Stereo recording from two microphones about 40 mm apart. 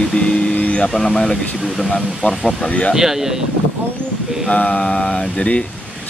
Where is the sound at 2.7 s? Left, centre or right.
Left.